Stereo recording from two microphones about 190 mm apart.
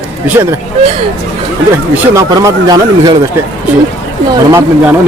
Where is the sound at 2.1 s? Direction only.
20° right (ahead or behind).